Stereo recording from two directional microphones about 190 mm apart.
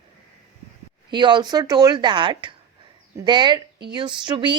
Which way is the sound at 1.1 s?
25° right (ahead or behind).